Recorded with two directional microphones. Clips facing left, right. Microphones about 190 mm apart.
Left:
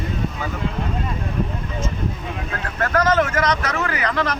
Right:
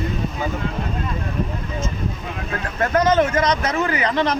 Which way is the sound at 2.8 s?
20° right (ahead or behind).